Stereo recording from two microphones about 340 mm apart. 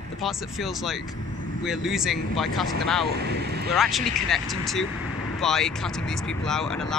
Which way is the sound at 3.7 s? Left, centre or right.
Centre.